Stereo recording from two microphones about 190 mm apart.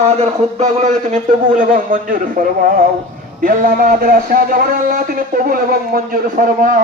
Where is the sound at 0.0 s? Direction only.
35° right (ahead or behind).